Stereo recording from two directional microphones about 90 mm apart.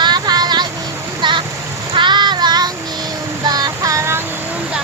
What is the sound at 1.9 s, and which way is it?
Child singing, 60° right (ahead or behind).